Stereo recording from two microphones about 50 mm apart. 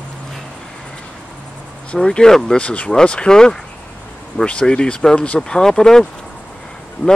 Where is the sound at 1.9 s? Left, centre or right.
Centre.